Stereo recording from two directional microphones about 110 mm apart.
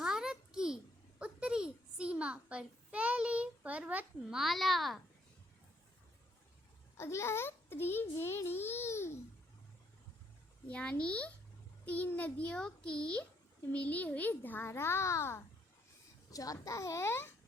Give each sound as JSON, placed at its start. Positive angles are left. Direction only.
{"t": 0.0, "sound": "a sound", "side_deg": -5}
{"t": 4.4, "sound": "a child's voice", "side_deg": 0}
{"t": 6.9, "sound": "a child's voice", "side_deg": 25}
{"t": 10.7, "sound": "a child's voice", "side_deg": 10}